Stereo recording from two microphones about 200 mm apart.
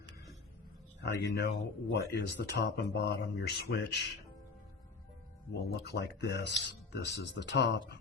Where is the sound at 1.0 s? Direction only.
55° left (ahead or behind).